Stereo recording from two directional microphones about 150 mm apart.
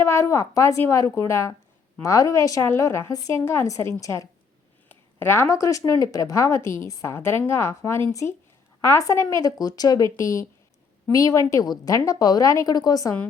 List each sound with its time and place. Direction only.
0.0 s speech: 20° left (ahead or behind)